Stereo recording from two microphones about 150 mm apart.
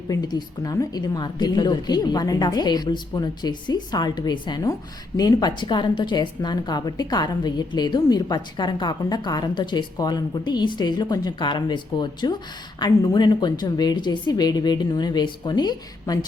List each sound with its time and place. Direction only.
0.1 s a woman's voice: 25° left (ahead or behind)